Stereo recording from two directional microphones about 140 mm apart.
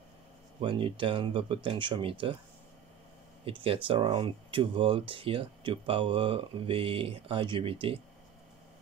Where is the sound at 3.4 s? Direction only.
40° right (ahead or behind).